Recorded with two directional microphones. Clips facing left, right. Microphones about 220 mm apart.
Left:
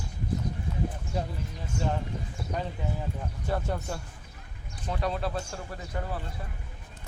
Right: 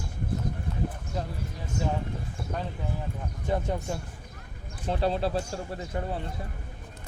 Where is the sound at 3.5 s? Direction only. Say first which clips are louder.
Right 2 dB; 20° right (ahead or behind).